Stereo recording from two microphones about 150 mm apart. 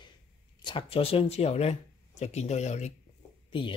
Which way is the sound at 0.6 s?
35° left (ahead or behind).